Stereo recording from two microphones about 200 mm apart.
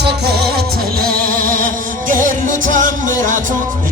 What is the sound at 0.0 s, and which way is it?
Music, 55° right (ahead or behind).